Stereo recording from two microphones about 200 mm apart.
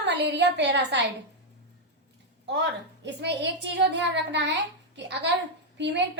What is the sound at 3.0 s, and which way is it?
A woman's voice, 60° right (ahead or behind).